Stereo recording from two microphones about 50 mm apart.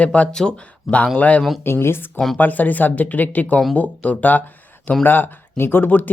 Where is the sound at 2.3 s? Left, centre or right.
Left.